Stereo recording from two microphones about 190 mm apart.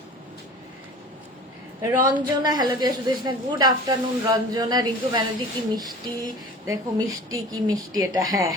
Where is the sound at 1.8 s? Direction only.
15° right (ahead or behind).